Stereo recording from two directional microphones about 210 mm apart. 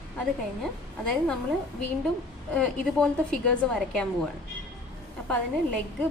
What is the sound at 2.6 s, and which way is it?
A woman's voice, 5° left (ahead or behind).